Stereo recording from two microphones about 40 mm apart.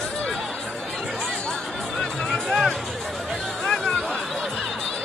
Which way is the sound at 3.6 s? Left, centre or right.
Centre.